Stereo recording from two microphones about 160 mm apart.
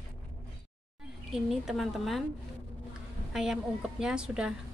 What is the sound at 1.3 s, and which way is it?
Speech, centre (ahead or behind).